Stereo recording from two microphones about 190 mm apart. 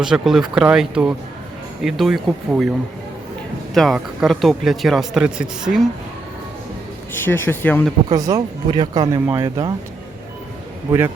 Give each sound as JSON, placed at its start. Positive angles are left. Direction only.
{"t": 0.0, "sound": "speech", "side_deg": 0}
{"t": 3.8, "sound": "speech", "side_deg": 0}
{"t": 7.1, "sound": "speech", "side_deg": 10}
{"t": 8.1, "sound": "speech", "side_deg": -20}